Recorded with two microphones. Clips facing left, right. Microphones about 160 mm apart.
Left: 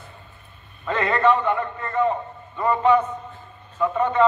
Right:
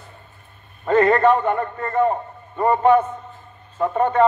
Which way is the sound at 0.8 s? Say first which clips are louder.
Right 5 dB; 45° right (ahead or behind).